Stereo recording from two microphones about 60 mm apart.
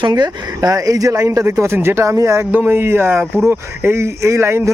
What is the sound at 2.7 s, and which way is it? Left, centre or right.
Speech, right.